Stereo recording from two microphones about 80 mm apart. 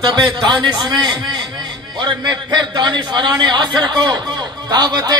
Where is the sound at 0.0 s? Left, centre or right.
Right.